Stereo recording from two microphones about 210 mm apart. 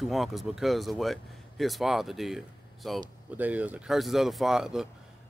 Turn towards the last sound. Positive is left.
turn(degrees=0)  # may be behind; listen again after turning